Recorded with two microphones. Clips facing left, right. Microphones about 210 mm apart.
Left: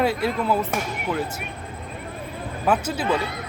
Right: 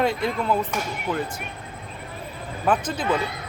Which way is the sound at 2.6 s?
10° left (ahead or behind).